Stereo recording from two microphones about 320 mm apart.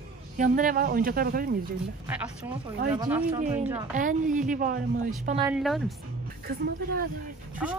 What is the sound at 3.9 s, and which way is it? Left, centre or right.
Speech, right.